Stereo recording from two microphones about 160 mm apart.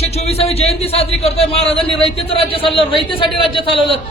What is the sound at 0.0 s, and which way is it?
Speech, 40° left (ahead or behind).